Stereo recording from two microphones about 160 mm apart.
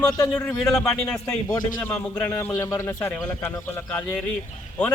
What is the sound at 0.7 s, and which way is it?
A man's voice, 5° left (ahead or behind).